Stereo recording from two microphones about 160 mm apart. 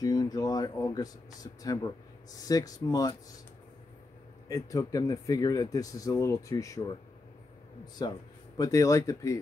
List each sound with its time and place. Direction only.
0.0 s speech: 25° left (ahead or behind)
4.5 s speech: 20° left (ahead or behind)
8.0 s speech: 25° left (ahead or behind)